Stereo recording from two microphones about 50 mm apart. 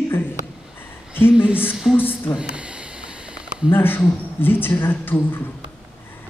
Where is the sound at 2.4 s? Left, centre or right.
Right.